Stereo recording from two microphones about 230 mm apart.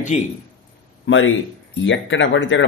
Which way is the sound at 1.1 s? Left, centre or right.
Left.